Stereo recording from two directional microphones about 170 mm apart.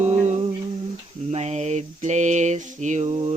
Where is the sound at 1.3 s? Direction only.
40° right (ahead or behind).